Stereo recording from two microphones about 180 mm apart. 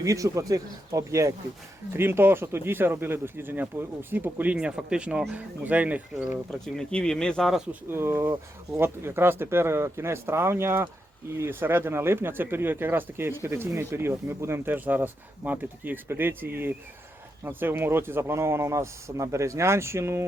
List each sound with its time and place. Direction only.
0.0 s speech: 20° right (ahead or behind)
6.5 s speech: 5° left (ahead or behind)
7.9 s speech: 15° right (ahead or behind)